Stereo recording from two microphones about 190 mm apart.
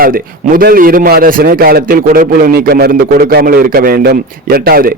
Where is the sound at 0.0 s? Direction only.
50° right (ahead or behind).